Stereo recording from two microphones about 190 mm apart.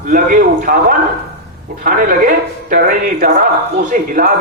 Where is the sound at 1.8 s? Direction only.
45° right (ahead or behind).